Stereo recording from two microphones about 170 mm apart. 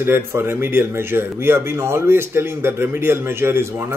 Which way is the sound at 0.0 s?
15° right (ahead or behind).